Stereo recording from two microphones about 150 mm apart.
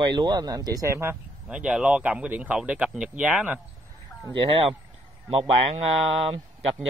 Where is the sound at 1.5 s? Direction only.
5° right (ahead or behind).